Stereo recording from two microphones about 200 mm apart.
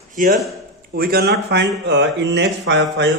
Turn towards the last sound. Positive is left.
turn(degrees=-65)  # may be behind; listen again after turning